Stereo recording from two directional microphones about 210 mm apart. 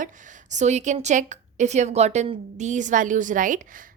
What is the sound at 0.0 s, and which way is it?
A woman's voice, 35° right (ahead or behind).